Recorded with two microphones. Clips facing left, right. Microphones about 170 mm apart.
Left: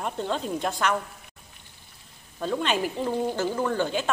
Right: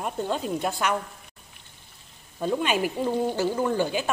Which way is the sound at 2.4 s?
10° right (ahead or behind).